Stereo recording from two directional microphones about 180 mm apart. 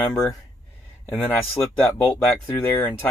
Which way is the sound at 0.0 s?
10° left (ahead or behind).